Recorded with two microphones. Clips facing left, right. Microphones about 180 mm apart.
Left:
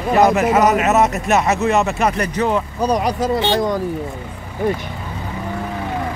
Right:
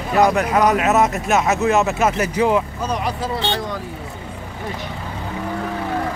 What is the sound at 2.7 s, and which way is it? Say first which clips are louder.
Speech: left 6 dB; 40° left (ahead or behind).